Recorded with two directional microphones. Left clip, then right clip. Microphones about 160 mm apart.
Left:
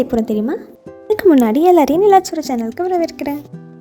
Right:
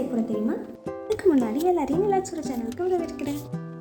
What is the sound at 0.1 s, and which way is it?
Speech, 55° left (ahead or behind).